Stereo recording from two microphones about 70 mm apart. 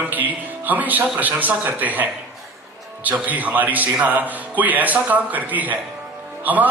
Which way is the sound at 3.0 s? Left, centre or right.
Right.